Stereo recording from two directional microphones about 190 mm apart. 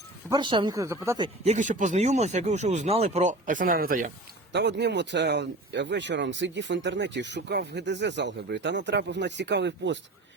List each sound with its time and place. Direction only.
0.3 s speech: 25° right (ahead or behind)
1.5 s speech: 40° right (ahead or behind)
4.5 s speech: 65° right (ahead or behind)